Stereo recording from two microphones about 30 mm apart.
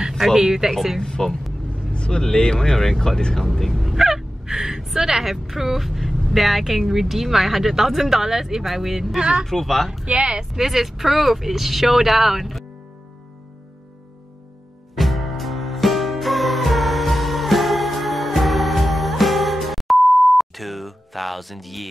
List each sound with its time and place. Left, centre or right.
0.2 s a sound: centre
0.5 s speech: centre
0.7 s speech: centre
1.0 s speech: left
1.9 s vehicle: left
2.4 s speech: left
2.7 s speech: centre
3.8 s gasp: centre
4.9 s a woman's voice: centre
9.5 s speech: centre
10.0 s speech: right
10.5 s speech: centre
15.0 s music: centre